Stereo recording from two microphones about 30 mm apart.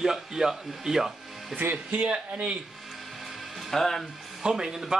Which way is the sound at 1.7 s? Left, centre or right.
Right.